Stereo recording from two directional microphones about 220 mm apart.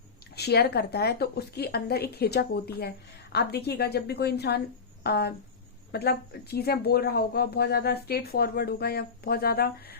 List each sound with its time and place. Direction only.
0.3 s speech: 50° left (ahead or behind)